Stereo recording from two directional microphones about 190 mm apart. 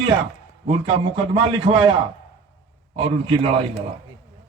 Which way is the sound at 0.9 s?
25° right (ahead or behind).